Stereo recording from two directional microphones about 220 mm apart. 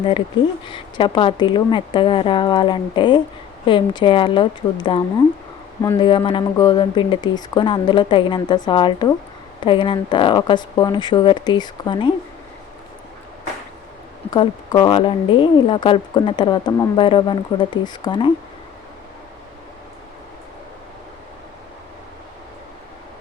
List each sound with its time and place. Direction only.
0.6 s speech: 20° left (ahead or behind)
14.3 s speech: 20° left (ahead or behind)